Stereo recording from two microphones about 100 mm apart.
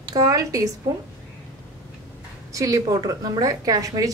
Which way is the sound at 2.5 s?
35° right (ahead or behind).